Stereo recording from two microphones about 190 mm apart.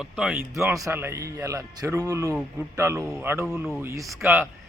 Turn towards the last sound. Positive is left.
turn(degrees=-15)  # may be behind; listen again after turning